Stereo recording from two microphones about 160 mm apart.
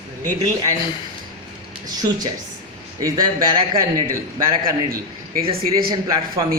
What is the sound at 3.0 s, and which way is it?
Speech, 25° right (ahead or behind).